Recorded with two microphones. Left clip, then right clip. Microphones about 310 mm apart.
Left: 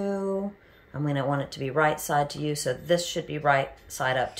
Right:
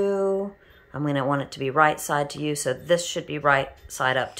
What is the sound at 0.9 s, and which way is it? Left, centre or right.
Speech, centre.